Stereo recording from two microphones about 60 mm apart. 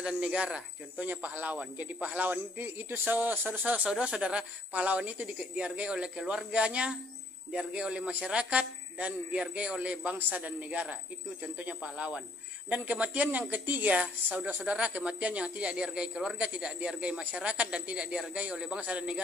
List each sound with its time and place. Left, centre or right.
0.0 s speech: centre
4.0 s speech: centre